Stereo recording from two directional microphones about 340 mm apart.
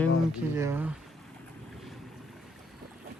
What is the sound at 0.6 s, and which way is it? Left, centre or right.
Speech, centre.